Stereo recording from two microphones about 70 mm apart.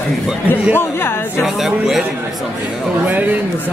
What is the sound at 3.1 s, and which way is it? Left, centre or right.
Speech, right.